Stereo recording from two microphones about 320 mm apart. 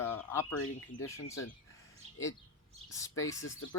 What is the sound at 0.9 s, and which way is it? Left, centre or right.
Speech, left.